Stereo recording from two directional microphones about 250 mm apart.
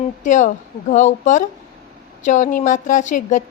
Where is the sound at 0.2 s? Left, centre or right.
Left.